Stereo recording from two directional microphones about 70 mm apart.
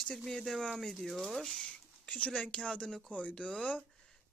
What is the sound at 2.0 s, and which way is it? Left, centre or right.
Speech, centre.